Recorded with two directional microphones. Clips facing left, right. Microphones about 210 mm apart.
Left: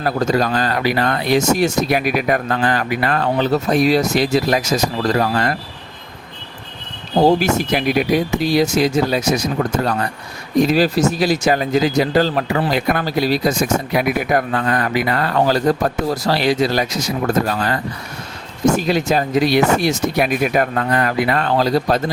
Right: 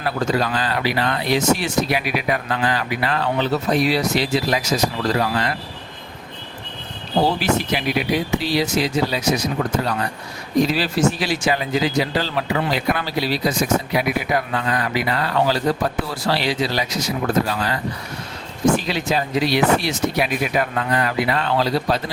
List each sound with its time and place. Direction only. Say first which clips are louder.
0.0 s speech: left 4 dB; 40° left (ahead or behind)
7.3 s speech: left 5 dB; 45° left (ahead or behind)
10.6 s speech: left 4 dB; 45° left (ahead or behind)